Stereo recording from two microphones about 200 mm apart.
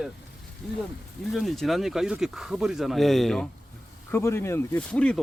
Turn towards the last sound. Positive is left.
turn(degrees=5)  # may be behind; listen again after turning